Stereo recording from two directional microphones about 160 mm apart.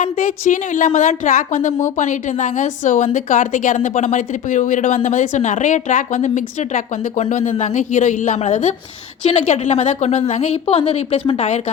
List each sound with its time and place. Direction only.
0.0 s speech: 55° left (ahead or behind)